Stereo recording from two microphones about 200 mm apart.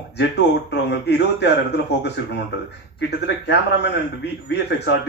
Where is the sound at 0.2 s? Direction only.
60° left (ahead or behind).